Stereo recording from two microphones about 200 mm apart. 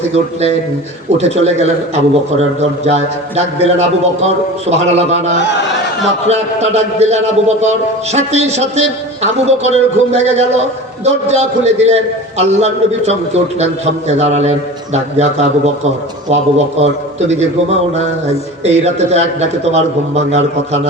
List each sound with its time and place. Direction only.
1.2 s a man's voice: 35° right (ahead or behind)